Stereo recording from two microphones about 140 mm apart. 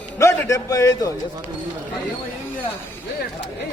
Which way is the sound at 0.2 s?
20° left (ahead or behind).